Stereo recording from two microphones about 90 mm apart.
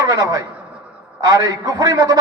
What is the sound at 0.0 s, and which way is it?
A man's voice, 45° right (ahead or behind).